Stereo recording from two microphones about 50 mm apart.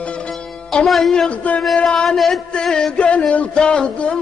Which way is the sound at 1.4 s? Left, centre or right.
Left.